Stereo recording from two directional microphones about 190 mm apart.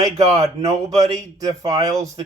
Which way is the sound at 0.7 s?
35° right (ahead or behind).